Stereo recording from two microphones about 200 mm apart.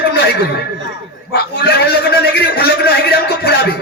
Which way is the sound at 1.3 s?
55° left (ahead or behind).